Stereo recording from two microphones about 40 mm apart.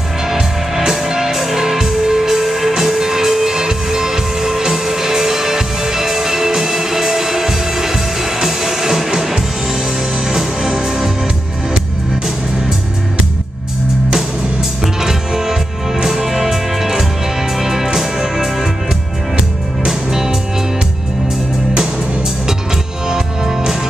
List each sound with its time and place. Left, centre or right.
0.3 s music: centre
15.0 s music: centre
19.9 s music: centre
23.0 s music: centre